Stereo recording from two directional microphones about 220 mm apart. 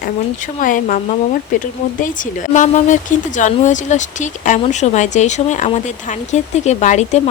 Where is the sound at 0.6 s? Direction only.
35° left (ahead or behind).